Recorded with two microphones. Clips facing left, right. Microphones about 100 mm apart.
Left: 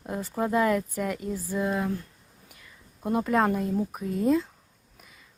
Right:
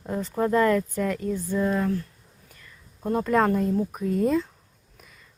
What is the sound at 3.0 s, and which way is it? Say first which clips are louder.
Speech: right 2 dB; 5° left (ahead or behind).